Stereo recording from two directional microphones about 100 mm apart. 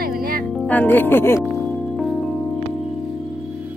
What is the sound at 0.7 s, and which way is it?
Speech, 20° left (ahead or behind).